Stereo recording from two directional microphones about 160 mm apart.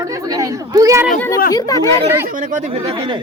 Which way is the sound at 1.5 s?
20° left (ahead or behind).